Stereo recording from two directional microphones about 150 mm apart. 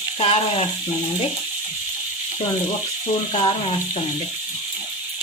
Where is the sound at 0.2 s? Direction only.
40° left (ahead or behind).